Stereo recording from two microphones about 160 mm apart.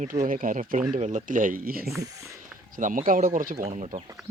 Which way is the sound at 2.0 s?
20° right (ahead or behind).